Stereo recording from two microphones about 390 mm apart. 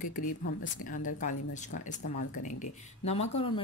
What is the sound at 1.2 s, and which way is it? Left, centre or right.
Speech, centre.